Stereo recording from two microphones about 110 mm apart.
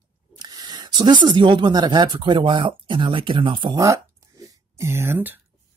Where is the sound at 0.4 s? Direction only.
40° right (ahead or behind).